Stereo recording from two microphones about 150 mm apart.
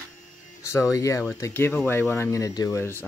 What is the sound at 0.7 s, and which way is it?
Speech, 20° left (ahead or behind).